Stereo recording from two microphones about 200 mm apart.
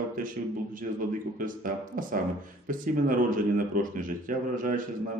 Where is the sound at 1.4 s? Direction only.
45° right (ahead or behind).